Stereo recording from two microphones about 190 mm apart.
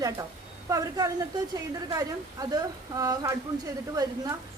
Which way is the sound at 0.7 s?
20° right (ahead or behind).